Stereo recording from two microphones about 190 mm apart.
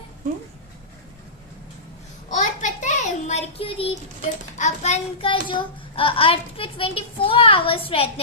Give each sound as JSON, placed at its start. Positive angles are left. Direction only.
{"t": 2.3, "sound": "child singing", "side_deg": 40}